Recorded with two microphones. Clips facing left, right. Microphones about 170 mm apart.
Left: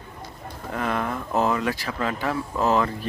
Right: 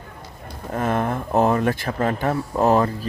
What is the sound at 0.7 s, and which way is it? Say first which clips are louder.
Speech: right 4 dB; 45° right (ahead or behind).